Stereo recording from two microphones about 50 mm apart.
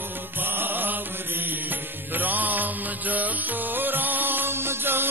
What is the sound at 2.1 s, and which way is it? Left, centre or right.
Music, right.